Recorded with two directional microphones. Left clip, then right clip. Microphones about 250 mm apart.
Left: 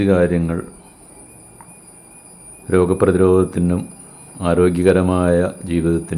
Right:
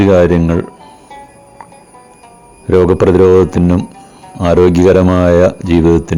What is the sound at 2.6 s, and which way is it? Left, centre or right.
Speech, right.